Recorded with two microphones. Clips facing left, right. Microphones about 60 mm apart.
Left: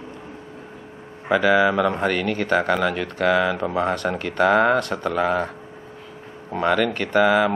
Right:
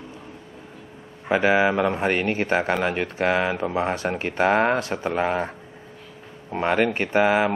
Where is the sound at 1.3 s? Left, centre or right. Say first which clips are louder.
Left 2 dB; right.